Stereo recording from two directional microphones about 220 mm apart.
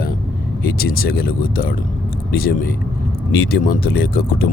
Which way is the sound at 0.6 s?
40° left (ahead or behind).